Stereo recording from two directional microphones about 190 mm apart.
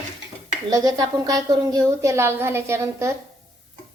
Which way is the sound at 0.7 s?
20° right (ahead or behind).